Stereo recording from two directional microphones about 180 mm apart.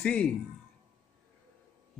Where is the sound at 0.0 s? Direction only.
5° left (ahead or behind).